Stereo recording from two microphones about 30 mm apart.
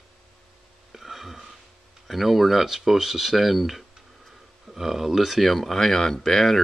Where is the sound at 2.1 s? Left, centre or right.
Centre.